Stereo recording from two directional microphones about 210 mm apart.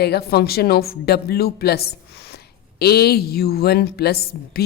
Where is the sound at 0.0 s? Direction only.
50° left (ahead or behind).